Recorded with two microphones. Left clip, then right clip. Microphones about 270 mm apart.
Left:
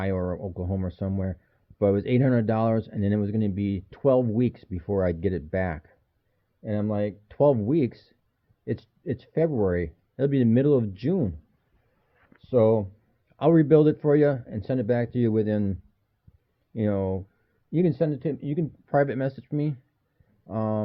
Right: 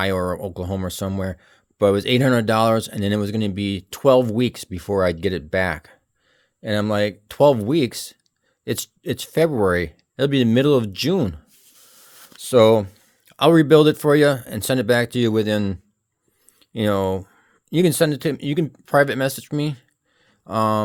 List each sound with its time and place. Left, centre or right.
0.0 s speech: right
6.6 s speech: right
12.4 s speech: right
13.2 s speech: right
18.9 s speech: right